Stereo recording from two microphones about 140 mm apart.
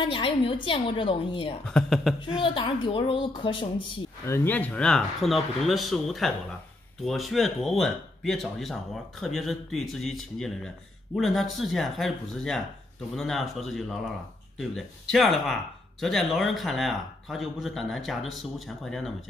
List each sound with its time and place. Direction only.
0.0 s a woman's voice: 40° left (ahead or behind)
1.7 s speech: centre (ahead or behind)
2.4 s a woman's voice: 40° left (ahead or behind)
4.3 s speech: 10° left (ahead or behind)